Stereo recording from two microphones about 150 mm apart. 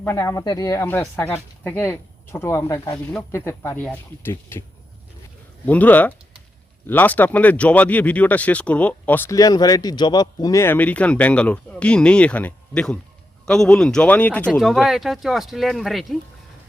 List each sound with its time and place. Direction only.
0.0 s speech: 20° left (ahead or behind)
5.6 s speech: 10° left (ahead or behind)
9.4 s speech: 25° left (ahead or behind); by 16.1 s centre (ahead or behind)